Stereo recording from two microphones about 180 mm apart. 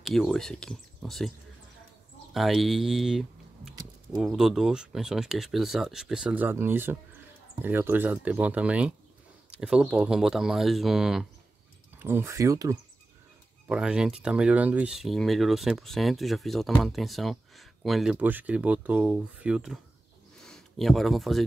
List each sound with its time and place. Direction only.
0.0 s speech: centre (ahead or behind)
2.3 s speech: centre (ahead or behind); by 12.7 s 15° right (ahead or behind)
13.7 s speech: 5° right (ahead or behind)